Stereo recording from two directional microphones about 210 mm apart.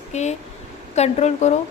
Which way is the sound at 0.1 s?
35° left (ahead or behind).